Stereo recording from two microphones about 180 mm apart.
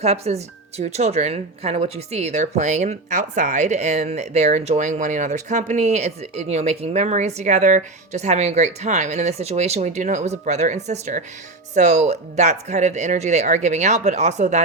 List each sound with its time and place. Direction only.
0.0 s speech: 35° right (ahead or behind)